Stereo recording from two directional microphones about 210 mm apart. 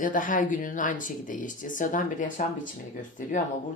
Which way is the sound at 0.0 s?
40° left (ahead or behind).